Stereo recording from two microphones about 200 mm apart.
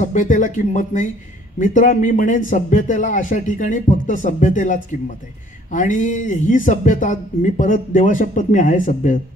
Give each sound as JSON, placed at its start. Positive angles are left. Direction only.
{"t": 0.0, "sound": "speech", "side_deg": 40}